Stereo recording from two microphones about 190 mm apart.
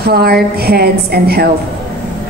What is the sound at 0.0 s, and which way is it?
A woman's voice, 55° right (ahead or behind).